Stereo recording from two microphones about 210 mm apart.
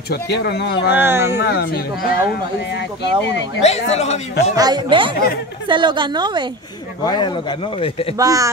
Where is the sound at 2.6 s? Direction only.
55° left (ahead or behind).